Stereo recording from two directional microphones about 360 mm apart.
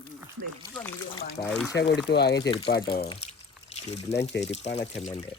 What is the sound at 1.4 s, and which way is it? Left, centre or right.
Speech, centre.